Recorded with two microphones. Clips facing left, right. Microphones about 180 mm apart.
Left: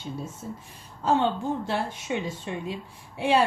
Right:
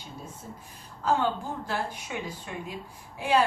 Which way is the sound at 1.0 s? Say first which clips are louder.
Left 3 dB; 25° left (ahead or behind).